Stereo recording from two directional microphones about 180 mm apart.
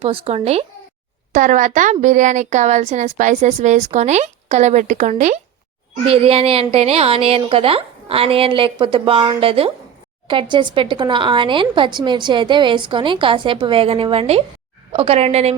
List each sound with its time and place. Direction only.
0.0 s a woman's voice: 30° right (ahead or behind)